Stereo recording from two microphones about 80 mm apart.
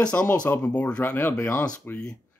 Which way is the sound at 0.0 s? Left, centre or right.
Centre.